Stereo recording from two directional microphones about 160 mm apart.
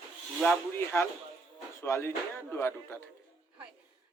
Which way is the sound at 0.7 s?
15° left (ahead or behind).